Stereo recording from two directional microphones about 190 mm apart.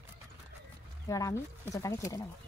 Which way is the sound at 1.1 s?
15° left (ahead or behind).